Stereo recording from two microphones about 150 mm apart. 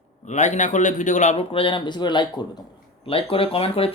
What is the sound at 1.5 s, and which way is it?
Speech, 35° left (ahead or behind).